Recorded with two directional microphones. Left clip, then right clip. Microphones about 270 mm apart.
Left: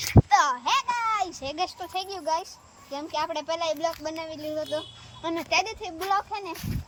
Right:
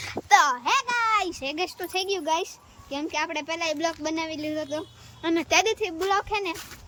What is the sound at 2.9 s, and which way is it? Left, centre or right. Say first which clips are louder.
A child's voice: right 1 dB; centre.